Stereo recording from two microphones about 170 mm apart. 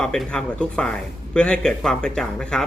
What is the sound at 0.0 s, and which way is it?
Speech, 5° left (ahead or behind).